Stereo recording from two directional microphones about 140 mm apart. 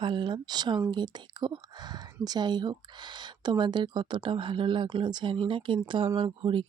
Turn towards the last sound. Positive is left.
turn(degrees=-40)  # may be behind; listen again after turning